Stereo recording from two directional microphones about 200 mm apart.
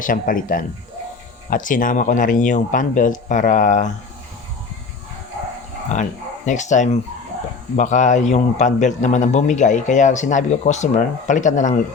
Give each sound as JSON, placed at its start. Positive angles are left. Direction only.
{"t": 0.0, "sound": "a man's voice", "side_deg": 45}
{"t": 5.9, "sound": "a man's voice", "side_deg": 35}